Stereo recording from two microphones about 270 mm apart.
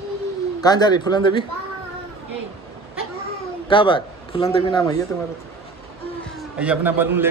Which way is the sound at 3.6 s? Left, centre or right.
Centre.